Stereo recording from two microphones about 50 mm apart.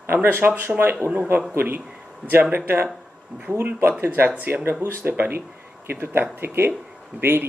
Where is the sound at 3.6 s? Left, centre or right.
Right.